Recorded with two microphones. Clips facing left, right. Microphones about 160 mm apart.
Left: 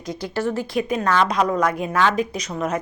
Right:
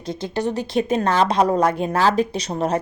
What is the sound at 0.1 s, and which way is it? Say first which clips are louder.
A woman's voice: right 1 dB; 20° right (ahead or behind).